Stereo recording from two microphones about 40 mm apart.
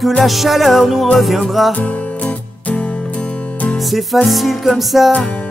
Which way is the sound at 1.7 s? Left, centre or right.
Left.